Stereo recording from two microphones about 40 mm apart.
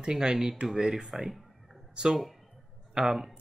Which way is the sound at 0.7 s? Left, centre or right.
Centre.